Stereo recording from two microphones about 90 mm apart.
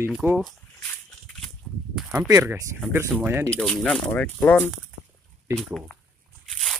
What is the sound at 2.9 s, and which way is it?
Speech, 20° right (ahead or behind).